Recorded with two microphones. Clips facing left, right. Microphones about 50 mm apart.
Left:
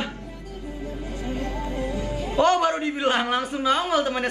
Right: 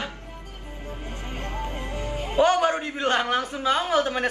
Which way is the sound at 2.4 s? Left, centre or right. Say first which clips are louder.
Even; centre.